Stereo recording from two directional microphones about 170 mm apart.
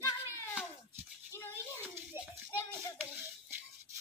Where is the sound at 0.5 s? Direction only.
10° right (ahead or behind).